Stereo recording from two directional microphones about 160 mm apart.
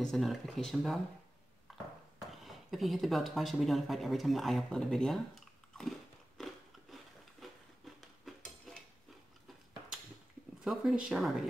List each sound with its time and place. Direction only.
0.0 s speech: centre (ahead or behind)
1.7 s a sound: centre (ahead or behind)
10.6 s speech: centre (ahead or behind)